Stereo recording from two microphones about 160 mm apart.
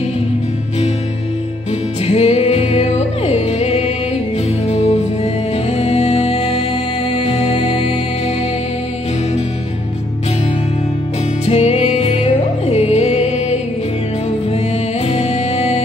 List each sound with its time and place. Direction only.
2.0 s music: 40° left (ahead or behind)
11.4 s music: 40° left (ahead or behind)
15.0 s music: 40° left (ahead or behind)